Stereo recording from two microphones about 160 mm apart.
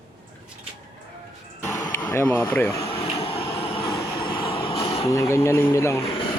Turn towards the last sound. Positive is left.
turn(degrees=35)  # may be behind; listen again after turning